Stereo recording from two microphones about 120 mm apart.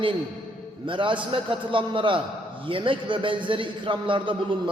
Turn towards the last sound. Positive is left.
turn(degrees=-40)  # may be behind; listen again after turning